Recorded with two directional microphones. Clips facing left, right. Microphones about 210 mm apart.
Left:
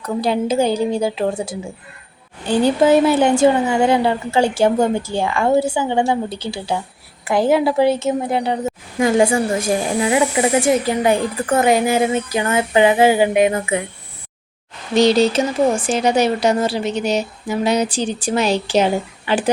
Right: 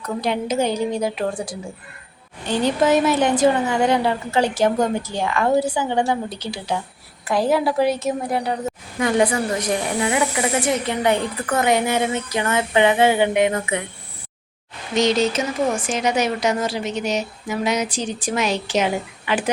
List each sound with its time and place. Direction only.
0.0 s a woman's voice: 30° left (ahead or behind)
14.9 s speech: 35° left (ahead or behind)